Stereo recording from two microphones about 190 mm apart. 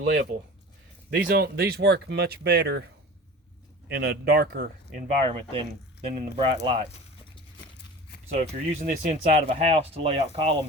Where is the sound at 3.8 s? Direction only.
60° right (ahead or behind).